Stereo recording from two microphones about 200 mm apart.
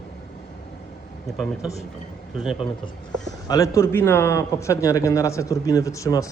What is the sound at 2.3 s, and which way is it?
Speech, centre (ahead or behind).